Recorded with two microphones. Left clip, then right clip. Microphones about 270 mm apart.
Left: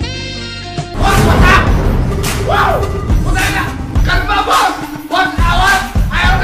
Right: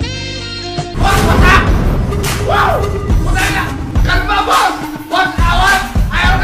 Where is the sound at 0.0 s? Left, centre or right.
Centre.